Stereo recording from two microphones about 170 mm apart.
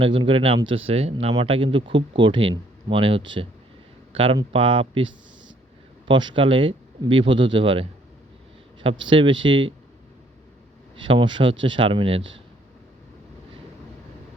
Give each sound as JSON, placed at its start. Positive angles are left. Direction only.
{"t": 0.0, "sound": "speech", "side_deg": -30}
{"t": 11.0, "sound": "speech", "side_deg": -30}